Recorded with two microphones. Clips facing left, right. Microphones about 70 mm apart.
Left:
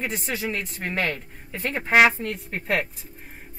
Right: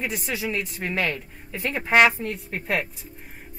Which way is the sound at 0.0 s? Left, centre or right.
Centre.